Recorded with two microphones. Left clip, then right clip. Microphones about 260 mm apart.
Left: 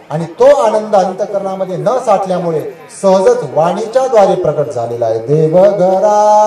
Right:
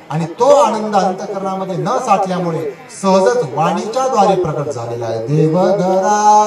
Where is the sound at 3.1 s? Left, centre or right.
Right.